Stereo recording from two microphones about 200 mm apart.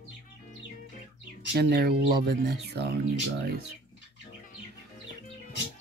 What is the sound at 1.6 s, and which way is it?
Speech, 50° right (ahead or behind).